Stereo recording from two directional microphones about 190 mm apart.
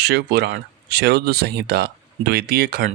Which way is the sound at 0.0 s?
60° right (ahead or behind).